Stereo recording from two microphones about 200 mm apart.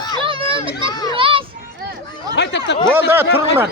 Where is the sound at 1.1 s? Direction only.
25° right (ahead or behind).